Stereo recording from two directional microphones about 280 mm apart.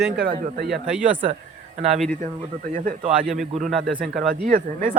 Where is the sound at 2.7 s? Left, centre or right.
Right.